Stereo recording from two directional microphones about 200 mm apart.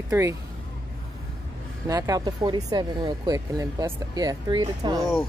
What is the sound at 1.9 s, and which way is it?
Speech, 15° right (ahead or behind).